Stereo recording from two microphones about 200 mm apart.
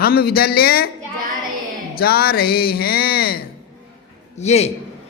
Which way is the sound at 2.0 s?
50° left (ahead or behind).